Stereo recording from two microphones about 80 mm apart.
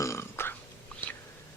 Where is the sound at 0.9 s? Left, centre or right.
Centre.